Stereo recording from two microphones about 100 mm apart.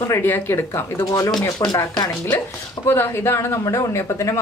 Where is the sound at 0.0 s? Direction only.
25° left (ahead or behind).